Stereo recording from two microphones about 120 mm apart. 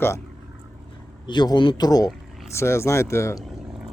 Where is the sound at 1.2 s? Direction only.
35° left (ahead or behind).